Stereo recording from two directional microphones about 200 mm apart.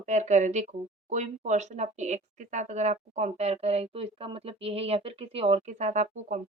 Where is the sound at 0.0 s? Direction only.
35° right (ahead or behind).